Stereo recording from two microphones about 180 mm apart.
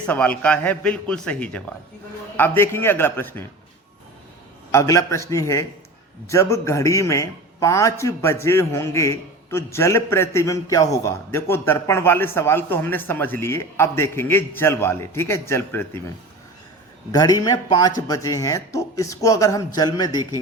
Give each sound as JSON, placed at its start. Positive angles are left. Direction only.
{"t": 0.0, "sound": "a man's voice", "side_deg": 5}
{"t": 4.7, "sound": "a man's voice", "side_deg": 15}
{"t": 17.1, "sound": "a man's voice", "side_deg": 20}